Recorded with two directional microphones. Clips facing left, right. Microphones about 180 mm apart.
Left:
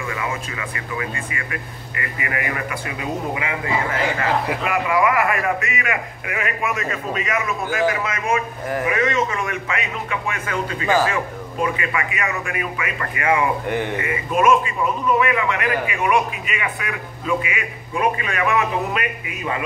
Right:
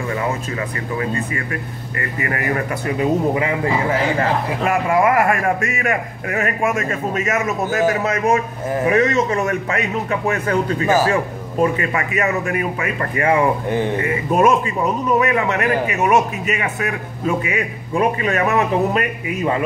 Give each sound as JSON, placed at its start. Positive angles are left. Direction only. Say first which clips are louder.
{"t": 0.1, "sound": "a man's voice", "louder": "right 5 dB", "side_deg": -35}
{"t": 8.6, "sound": "speech", "louder": "right 5 dB", "side_deg": -25}
{"t": 8.9, "sound": "speech", "louder": "right 6 dB", "side_deg": -40}